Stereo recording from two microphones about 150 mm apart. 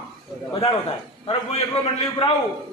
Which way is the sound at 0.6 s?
35° left (ahead or behind).